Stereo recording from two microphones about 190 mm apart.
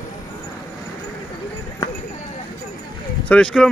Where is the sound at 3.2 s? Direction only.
5° left (ahead or behind).